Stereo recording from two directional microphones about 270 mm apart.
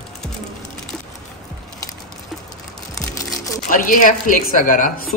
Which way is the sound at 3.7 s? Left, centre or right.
Left.